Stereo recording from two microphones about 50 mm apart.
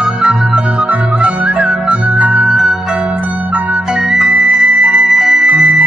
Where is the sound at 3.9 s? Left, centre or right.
Centre.